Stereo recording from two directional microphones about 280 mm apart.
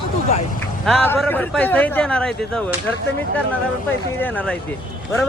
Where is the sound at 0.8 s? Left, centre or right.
Centre.